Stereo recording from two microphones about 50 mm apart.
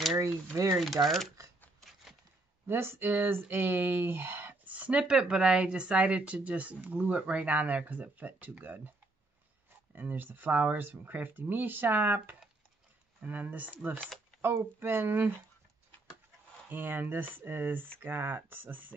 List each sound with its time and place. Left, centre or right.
0.7 s speech: centre
1.8 s a sound: centre
2.6 s speech: right
4.6 s a sound: right
5.0 s speech: centre; by 8.9 s right
9.9 s speech: right
14.4 s speech: right
16.6 s speech: right